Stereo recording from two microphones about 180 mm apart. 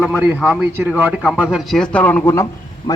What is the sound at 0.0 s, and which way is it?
A man's voice, 5° right (ahead or behind).